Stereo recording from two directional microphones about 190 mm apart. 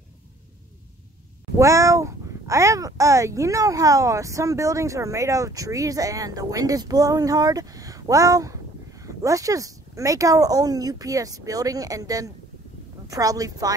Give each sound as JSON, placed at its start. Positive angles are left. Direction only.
{"t": 1.6, "sound": "a child's voice", "side_deg": -15}